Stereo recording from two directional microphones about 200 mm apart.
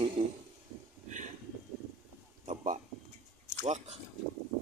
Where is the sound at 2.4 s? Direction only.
35° right (ahead or behind).